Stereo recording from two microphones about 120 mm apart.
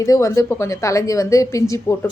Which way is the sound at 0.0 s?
25° left (ahead or behind).